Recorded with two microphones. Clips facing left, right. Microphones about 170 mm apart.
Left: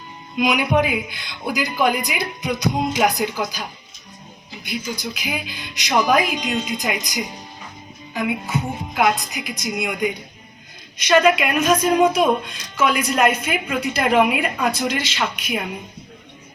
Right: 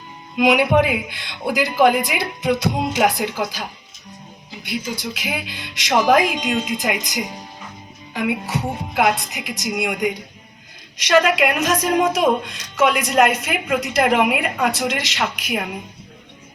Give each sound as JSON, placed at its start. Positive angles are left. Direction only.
{"t": 0.3, "sound": "a woman's voice", "side_deg": -85}
{"t": 4.6, "sound": "a woman's voice", "side_deg": -85}
{"t": 8.1, "sound": "a woman's voice", "side_deg": -90}